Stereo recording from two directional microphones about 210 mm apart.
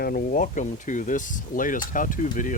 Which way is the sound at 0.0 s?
40° left (ahead or behind).